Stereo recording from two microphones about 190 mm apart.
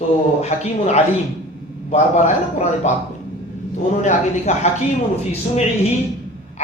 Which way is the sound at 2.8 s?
35° left (ahead or behind).